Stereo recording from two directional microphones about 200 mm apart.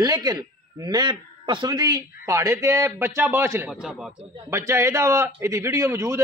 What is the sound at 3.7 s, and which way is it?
Speech, centre (ahead or behind).